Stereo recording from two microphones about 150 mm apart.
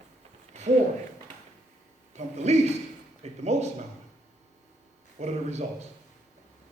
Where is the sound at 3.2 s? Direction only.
45° right (ahead or behind).